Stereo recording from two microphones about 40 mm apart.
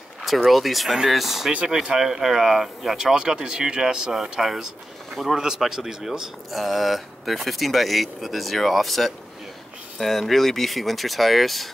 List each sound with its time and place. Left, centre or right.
0.5 s speech: centre
1.7 s speech: centre
3.0 s speech: centre
5.4 s speech: centre